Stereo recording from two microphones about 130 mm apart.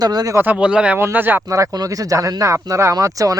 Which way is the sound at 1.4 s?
25° right (ahead or behind).